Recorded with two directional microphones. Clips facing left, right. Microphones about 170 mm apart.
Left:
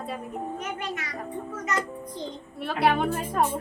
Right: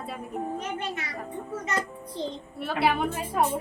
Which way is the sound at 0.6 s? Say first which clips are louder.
Even; 30° right (ahead or behind).